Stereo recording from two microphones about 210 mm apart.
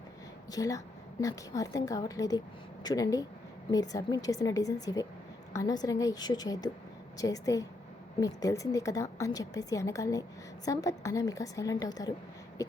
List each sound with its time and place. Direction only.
0.5 s a woman's voice: 15° left (ahead or behind)